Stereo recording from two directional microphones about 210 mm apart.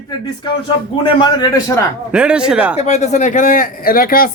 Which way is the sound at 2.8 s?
30° left (ahead or behind).